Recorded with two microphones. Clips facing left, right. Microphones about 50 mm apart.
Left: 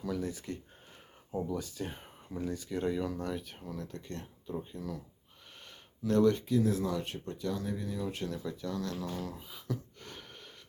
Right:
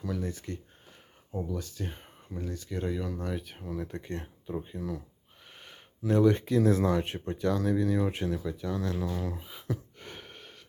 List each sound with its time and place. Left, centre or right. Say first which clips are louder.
0.0 s speech: right 1 dB; centre
3.8 s speech: right 5 dB; right
4.8 s speech: right 4 dB; centre
5.5 s gasp: right 2 dB; centre
6.1 s speech: right 2 dB; centre
6.4 s speech: right 4 dB; right
7.0 s speech: right 5 dB; right
7.4 s speech: right 9 dB; right
8.1 s speech: right 5 dB; right
9.3 s a sound: right 3 dB; centre